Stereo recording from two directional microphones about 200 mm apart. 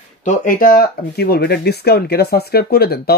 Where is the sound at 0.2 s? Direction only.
40° left (ahead or behind).